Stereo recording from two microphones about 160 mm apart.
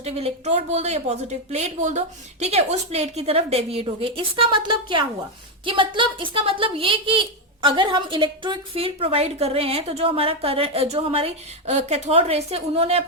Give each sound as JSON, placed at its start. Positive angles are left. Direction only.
{"t": 0.0, "sound": "a woman's voice", "side_deg": -40}